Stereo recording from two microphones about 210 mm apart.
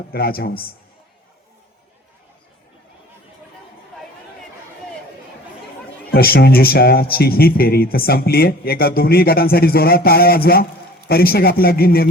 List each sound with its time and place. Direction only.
0.1 s speech: 45° left (ahead or behind)
6.1 s speech: 45° left (ahead or behind)